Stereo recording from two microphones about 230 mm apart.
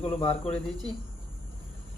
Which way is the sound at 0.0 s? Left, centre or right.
Left.